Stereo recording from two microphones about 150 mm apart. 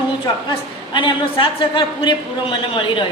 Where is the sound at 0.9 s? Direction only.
35° left (ahead or behind).